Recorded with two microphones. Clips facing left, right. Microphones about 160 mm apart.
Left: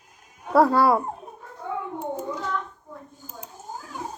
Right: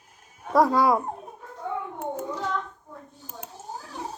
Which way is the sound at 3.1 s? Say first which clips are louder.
Even; 65° right (ahead or behind).